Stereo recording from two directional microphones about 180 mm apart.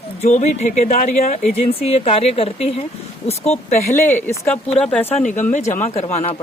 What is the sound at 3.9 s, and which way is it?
Speech, 10° left (ahead or behind).